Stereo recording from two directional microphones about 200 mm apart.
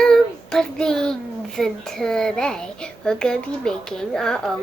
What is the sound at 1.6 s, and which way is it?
A child's voice, 5° left (ahead or behind).